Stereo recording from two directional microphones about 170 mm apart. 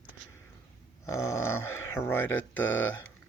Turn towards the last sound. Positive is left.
turn(degrees=10)  # may be behind; listen again after turning